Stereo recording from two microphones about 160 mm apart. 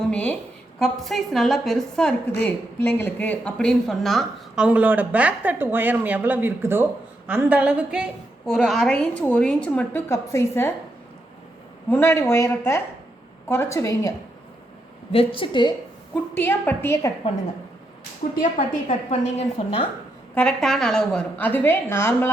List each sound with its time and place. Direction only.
0.1 s a woman's voice: 10° left (ahead or behind)
11.9 s a woman's voice: 15° left (ahead or behind)
15.1 s a woman's voice: 35° left (ahead or behind)
16.1 s a woman's voice: 10° left (ahead or behind)
18.3 s a woman's voice: 50° left (ahead or behind)
20.3 s a woman's voice: 5° left (ahead or behind)